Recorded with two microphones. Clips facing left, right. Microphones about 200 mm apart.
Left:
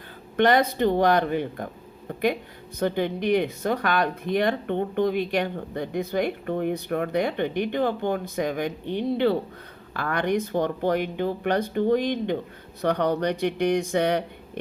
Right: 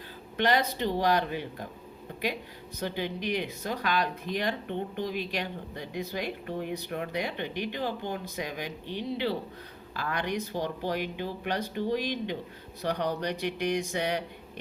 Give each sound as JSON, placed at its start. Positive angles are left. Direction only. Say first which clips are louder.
{"t": 0.3, "sound": "speech", "louder": "left 7 dB", "side_deg": 55}
{"t": 2.8, "sound": "speech", "louder": "left 8 dB", "side_deg": 55}